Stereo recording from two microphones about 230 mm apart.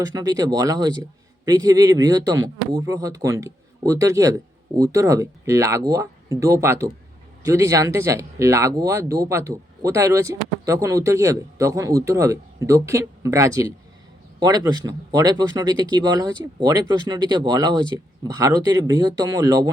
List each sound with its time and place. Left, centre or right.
0.0 s speech: centre